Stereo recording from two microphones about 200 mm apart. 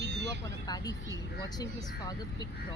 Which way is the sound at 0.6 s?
20° left (ahead or behind).